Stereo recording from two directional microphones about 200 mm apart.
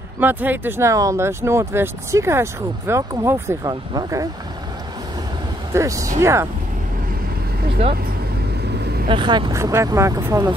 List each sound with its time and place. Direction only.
0.2 s speech: 10° right (ahead or behind)
5.7 s speech: 15° right (ahead or behind)
8.7 s vehicle: 55° right (ahead or behind)
9.1 s speech: 25° right (ahead or behind)